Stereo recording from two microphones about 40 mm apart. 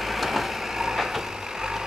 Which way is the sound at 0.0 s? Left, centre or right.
Centre.